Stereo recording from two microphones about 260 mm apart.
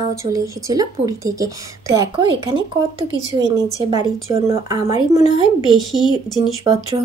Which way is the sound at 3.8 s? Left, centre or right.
Centre.